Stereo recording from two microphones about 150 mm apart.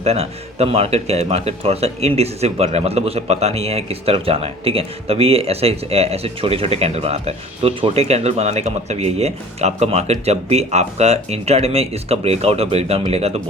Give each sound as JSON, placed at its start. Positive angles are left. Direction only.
{"t": 0.0, "sound": "speech", "side_deg": -45}